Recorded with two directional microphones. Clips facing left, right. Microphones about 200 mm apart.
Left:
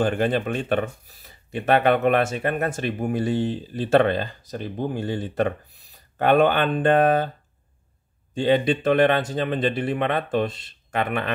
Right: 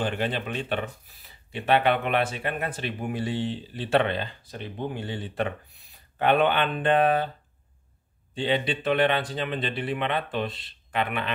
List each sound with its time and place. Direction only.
0.0 s speech: 50° left (ahead or behind)
8.4 s speech: 45° left (ahead or behind)